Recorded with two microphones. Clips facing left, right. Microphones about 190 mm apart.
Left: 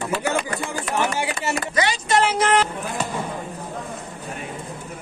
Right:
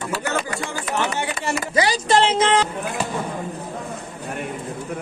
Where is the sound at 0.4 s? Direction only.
Centre (ahead or behind).